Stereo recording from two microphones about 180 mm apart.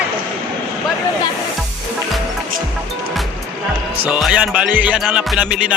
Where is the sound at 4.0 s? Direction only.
10° right (ahead or behind).